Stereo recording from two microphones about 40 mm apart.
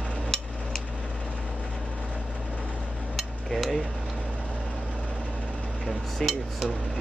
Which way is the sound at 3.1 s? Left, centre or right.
Centre.